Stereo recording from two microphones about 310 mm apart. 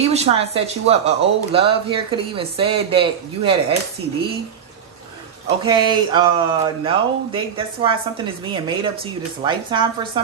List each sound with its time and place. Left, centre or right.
0.0 s speech: centre
5.7 s speech: centre